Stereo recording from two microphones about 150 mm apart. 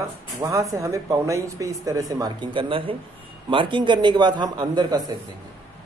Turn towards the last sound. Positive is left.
turn(degrees=-25)  # may be behind; listen again after turning